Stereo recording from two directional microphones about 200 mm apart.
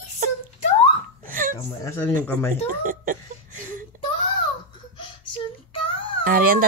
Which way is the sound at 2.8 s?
40° right (ahead or behind).